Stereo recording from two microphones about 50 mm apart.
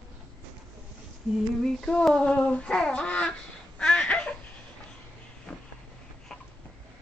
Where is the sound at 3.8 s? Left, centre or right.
Left.